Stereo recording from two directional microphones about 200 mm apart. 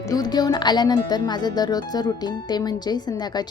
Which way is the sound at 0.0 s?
20° left (ahead or behind).